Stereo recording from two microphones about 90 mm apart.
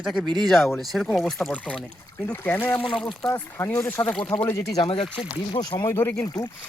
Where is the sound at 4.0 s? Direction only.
35° left (ahead or behind).